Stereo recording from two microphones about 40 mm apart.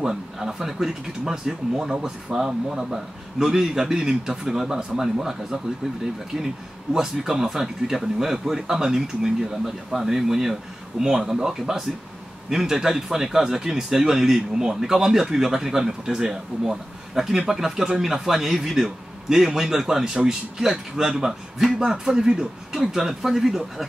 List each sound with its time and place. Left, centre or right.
0.0 s a man's voice: centre
21.7 s a man's voice: centre